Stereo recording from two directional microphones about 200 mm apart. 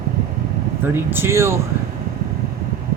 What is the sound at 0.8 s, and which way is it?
Speech, 10° right (ahead or behind).